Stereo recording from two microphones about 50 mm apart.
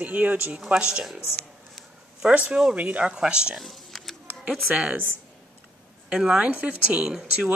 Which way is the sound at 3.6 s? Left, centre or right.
Centre.